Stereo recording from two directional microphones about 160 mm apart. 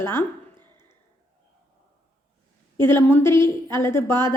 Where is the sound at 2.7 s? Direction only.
15° left (ahead or behind).